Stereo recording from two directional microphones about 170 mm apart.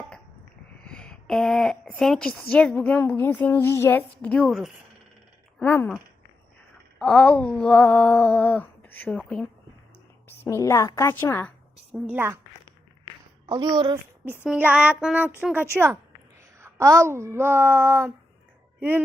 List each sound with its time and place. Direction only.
0.8 s a woman's voice: 5° left (ahead or behind)
7.0 s a woman's voice: 5° left (ahead or behind)
11.9 s speech: 10° right (ahead or behind)
13.5 s a woman's voice: 25° right (ahead or behind)
14.4 s speech: 5° right (ahead or behind)